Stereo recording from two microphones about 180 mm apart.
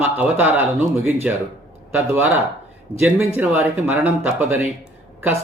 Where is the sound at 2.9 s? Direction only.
10° left (ahead or behind).